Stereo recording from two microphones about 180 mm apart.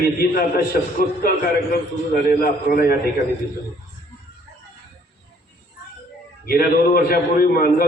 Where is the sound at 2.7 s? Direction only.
55° left (ahead or behind).